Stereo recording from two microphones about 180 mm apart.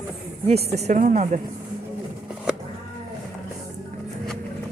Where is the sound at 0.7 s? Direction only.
40° right (ahead or behind).